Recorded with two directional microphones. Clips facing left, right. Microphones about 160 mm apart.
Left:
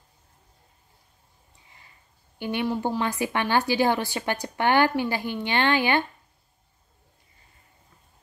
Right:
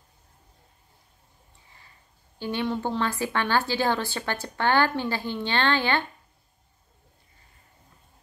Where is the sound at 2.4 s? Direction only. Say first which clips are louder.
Left 1 dB; 15° left (ahead or behind).